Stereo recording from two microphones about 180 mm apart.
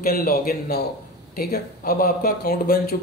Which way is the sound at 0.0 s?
55° left (ahead or behind).